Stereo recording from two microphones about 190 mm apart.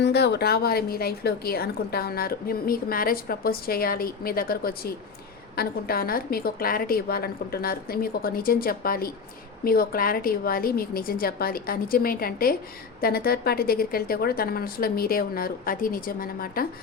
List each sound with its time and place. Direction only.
0.0 s a woman's voice: 60° left (ahead or behind)